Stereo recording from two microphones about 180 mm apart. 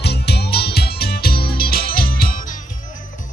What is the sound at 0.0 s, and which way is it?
Music, 65° left (ahead or behind).